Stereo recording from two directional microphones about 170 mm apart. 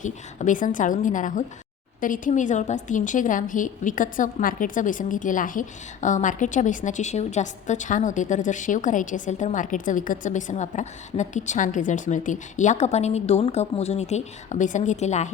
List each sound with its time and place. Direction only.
0.0 s a woman's voice: 50° left (ahead or behind)